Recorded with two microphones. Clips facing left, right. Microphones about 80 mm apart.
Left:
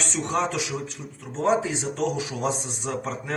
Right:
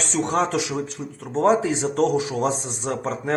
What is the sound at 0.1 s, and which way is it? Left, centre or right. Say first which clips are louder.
Speech: right 5 dB; right.